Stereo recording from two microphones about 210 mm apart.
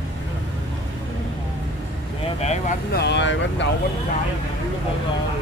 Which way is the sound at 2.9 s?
55° left (ahead or behind).